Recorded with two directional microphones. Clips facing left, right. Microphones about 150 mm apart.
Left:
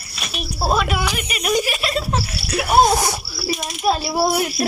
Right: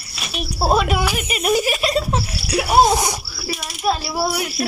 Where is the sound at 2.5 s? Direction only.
20° right (ahead or behind).